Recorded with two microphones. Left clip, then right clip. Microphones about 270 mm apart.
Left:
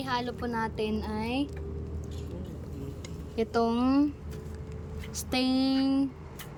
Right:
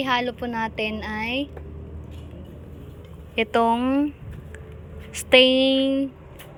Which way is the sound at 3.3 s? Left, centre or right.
Centre.